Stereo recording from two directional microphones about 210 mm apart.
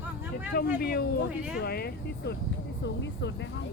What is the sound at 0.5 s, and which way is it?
Speech, 45° left (ahead or behind).